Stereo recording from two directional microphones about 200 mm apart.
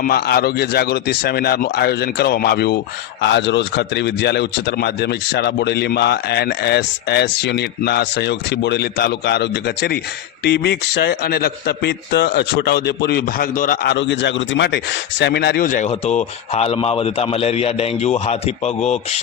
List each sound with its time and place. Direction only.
0.0 s a man's voice: 50° left (ahead or behind)
13.9 s a man's voice: 65° left (ahead or behind); by 19.2 s 35° left (ahead or behind)